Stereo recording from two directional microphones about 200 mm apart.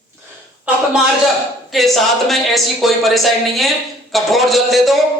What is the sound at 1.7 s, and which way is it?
A man's voice, centre (ahead or behind).